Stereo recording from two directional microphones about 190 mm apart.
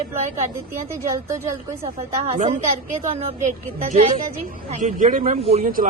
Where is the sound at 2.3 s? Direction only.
40° right (ahead or behind).